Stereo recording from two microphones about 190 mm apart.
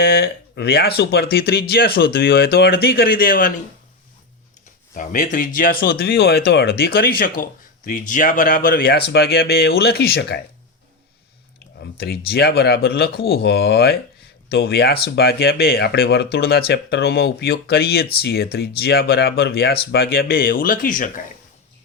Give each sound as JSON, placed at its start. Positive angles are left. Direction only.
{"t": 0.0, "sound": "speech", "side_deg": 55}
{"t": 4.9, "sound": "speech", "side_deg": 45}
{"t": 11.8, "sound": "speech", "side_deg": 55}